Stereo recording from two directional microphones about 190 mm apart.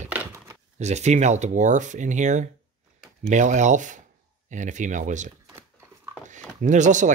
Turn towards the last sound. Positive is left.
turn(degrees=-40)  # may be behind; listen again after turning